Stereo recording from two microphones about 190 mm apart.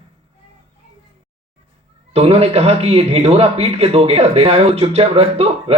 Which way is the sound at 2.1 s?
30° right (ahead or behind).